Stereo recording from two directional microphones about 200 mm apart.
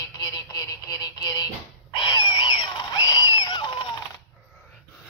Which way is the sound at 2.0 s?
20° left (ahead or behind).